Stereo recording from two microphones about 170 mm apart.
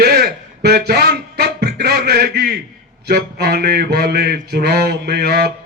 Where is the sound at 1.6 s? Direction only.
70° right (ahead or behind).